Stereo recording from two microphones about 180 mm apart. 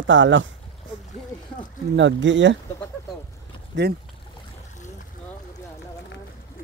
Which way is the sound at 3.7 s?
90° right.